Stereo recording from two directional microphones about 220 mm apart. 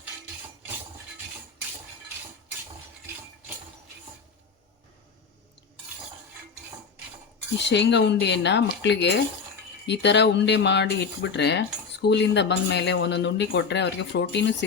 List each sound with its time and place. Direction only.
7.6 s speech: 55° left (ahead or behind)